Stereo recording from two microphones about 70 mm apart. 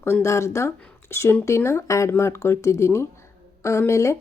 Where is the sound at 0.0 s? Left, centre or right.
Left.